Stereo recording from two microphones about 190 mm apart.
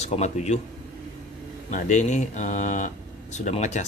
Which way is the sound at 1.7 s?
35° left (ahead or behind).